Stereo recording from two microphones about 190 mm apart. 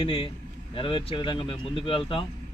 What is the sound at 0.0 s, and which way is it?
A man's voice, 30° left (ahead or behind).